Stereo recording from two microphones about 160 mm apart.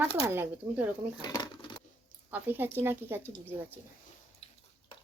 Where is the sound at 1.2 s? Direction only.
25° left (ahead or behind).